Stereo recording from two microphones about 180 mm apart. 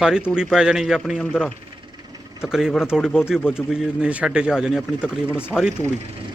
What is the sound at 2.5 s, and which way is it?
Speech, centre (ahead or behind).